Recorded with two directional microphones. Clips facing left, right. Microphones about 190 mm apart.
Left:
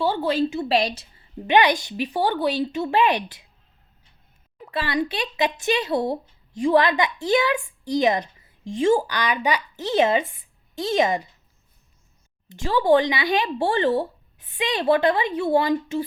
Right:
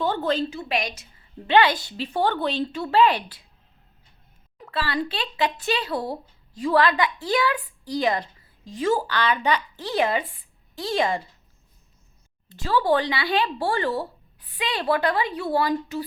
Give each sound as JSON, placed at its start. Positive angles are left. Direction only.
{"t": 0.0, "sound": "speech", "side_deg": 10}
{"t": 0.5, "sound": "a woman's voice", "side_deg": 30}
{"t": 1.5, "sound": "speech", "side_deg": 20}
{"t": 4.6, "sound": "a woman's voice", "side_deg": 20}
{"t": 12.5, "sound": "speech", "side_deg": 20}